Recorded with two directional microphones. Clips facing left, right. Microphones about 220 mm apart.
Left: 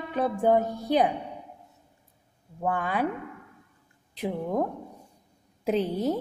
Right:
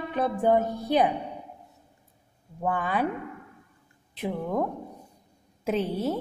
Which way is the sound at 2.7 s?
10° left (ahead or behind).